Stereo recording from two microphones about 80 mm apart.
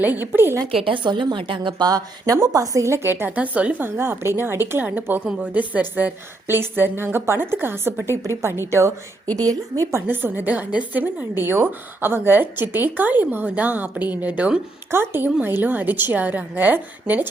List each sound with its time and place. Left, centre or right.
0.0 s a woman's voice: right
0.6 s a woman's voice: right
9.3 s a woman's voice: right
10.1 s a woman's voice: right
14.8 s a woman's voice: right